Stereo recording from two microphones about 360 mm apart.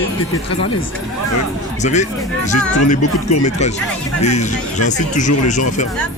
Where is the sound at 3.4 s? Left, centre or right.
Centre.